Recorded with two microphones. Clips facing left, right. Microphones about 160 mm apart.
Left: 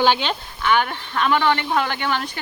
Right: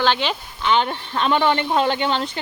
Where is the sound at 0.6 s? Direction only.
20° right (ahead or behind).